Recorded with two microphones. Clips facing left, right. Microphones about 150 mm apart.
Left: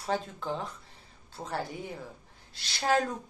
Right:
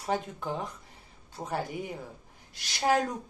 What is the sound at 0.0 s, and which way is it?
Speech, 15° right (ahead or behind).